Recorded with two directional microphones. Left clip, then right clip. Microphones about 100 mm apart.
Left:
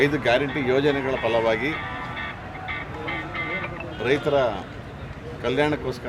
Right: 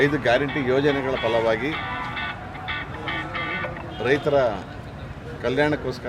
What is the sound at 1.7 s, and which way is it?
Music, 60° right (ahead or behind).